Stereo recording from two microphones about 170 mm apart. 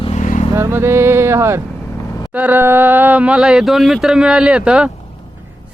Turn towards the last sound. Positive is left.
turn(degrees=-5)  # may be behind; listen again after turning